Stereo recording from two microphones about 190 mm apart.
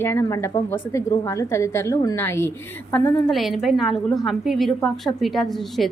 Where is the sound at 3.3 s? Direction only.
Centre (ahead or behind).